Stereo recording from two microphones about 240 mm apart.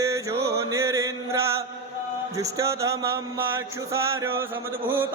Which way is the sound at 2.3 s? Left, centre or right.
Centre.